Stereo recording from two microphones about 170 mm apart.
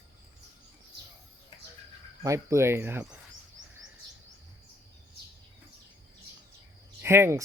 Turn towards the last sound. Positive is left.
turn(degrees=-15)  # may be behind; listen again after turning